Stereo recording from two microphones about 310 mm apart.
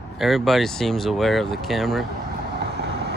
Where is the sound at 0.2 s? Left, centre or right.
Centre.